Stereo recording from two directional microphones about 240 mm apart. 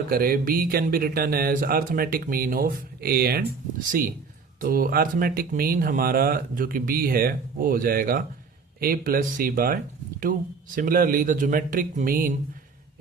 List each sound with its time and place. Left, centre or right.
0.1 s speech: right
4.6 s speech: right
10.8 s speech: right